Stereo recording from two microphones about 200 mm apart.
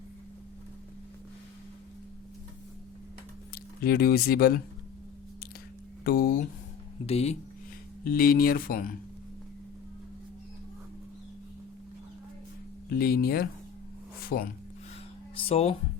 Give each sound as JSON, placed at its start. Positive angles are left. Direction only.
{"t": 3.5, "sound": "speech", "side_deg": 50}
{"t": 6.1, "sound": "speech", "side_deg": 50}
{"t": 7.0, "sound": "speech", "side_deg": 30}
{"t": 8.0, "sound": "speech", "side_deg": 45}
{"t": 12.9, "sound": "speech", "side_deg": 50}
{"t": 15.4, "sound": "speech", "side_deg": 30}